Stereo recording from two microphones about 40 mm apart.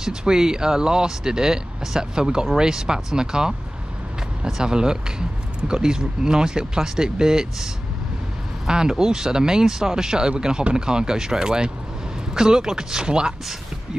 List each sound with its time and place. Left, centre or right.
0.0 s speech: centre